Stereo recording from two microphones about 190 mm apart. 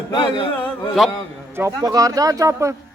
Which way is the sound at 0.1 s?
25° left (ahead or behind).